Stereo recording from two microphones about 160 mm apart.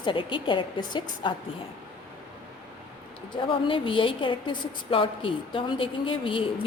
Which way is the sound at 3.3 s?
30° left (ahead or behind).